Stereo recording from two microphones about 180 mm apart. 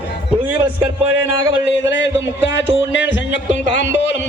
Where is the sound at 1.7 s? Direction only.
90° left.